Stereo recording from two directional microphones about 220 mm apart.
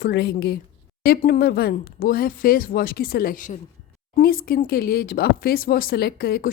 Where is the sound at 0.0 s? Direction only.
45° left (ahead or behind).